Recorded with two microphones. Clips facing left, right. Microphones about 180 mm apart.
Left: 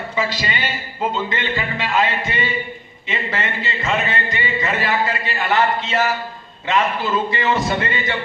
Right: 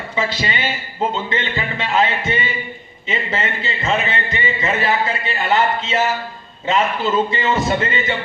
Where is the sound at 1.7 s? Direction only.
25° right (ahead or behind).